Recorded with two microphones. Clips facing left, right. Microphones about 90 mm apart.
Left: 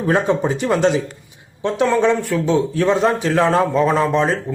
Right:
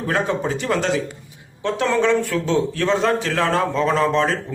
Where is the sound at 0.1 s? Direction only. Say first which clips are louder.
Left 4 dB; 20° left (ahead or behind).